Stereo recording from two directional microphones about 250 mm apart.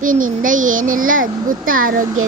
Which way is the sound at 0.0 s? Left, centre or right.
Right.